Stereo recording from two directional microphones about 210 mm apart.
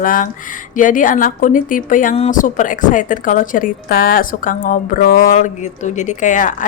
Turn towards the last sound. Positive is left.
turn(degrees=35)  # may be behind; listen again after turning